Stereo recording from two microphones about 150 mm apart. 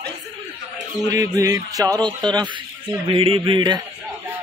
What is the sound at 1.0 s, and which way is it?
Music, 25° right (ahead or behind).